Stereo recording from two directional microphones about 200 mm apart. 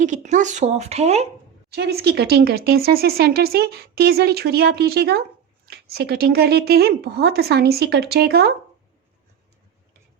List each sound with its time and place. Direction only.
0.0 s a woman's voice: 35° right (ahead or behind)
1.7 s speech: 55° right (ahead or behind)